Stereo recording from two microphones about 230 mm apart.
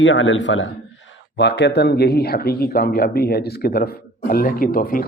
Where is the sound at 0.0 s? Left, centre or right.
Left.